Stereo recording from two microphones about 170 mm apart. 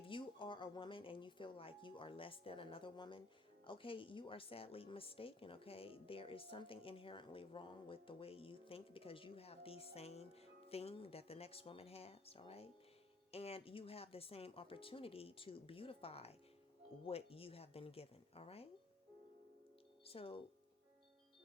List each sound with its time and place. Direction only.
0.0 s speech: 30° left (ahead or behind)
20.1 s speech: 35° left (ahead or behind)